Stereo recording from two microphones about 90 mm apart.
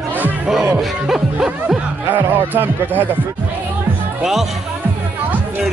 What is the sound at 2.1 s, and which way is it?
Speech, 20° right (ahead or behind).